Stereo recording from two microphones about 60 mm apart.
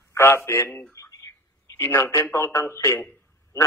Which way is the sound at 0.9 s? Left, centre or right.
Left.